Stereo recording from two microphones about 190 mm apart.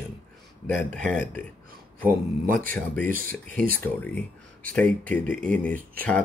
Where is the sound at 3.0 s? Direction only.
45° right (ahead or behind).